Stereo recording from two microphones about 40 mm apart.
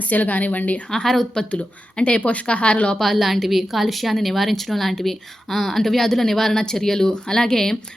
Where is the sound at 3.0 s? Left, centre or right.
Centre.